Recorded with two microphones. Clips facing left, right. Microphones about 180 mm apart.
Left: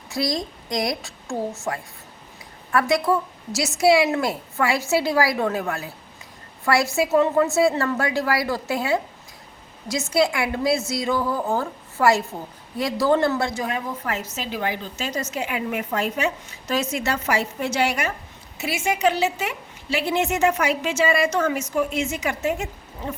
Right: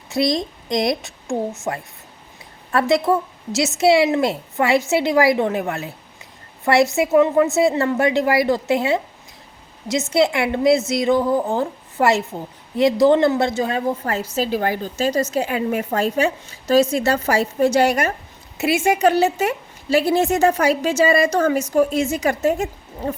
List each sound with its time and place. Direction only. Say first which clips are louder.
0.1 s a woman's voice: right 5 dB; 25° right (ahead or behind); by 18.1 s 40° right (ahead or behind)
18.5 s a woman's voice: right 7 dB; 60° right (ahead or behind)
19.0 s a woman's voice: right 3 dB; 40° right (ahead or behind)